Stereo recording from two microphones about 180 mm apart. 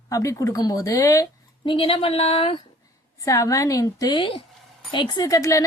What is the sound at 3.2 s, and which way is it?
A woman's voice, 15° left (ahead or behind).